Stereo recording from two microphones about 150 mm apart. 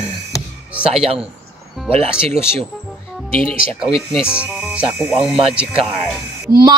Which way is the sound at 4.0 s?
5° right (ahead or behind).